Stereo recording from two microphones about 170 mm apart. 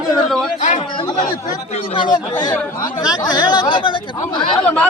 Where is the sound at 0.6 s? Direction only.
50° left (ahead or behind).